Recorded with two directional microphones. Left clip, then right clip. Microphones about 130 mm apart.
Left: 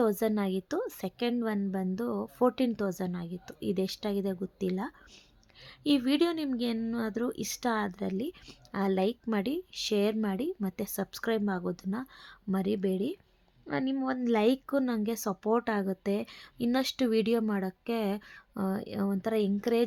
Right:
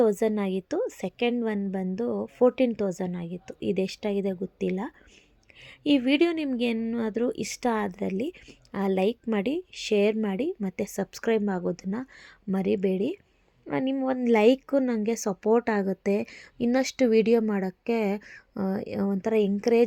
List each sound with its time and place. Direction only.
0.0 s a woman's voice: 10° right (ahead or behind)
6.5 s speech: 20° right (ahead or behind)
6.7 s a woman's voice: 5° right (ahead or behind)
14.3 s speech: 25° right (ahead or behind)